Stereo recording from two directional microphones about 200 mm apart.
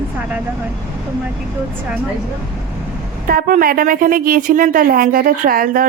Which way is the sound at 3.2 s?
45° right (ahead or behind).